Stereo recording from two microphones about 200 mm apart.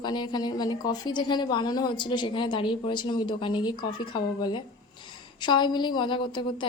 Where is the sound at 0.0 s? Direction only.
20° left (ahead or behind).